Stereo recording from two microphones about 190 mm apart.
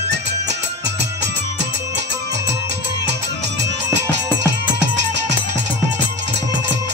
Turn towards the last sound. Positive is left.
turn(degrees=-65)  # may be behind; listen again after turning